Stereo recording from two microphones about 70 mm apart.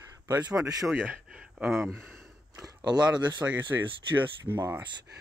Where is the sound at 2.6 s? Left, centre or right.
Right.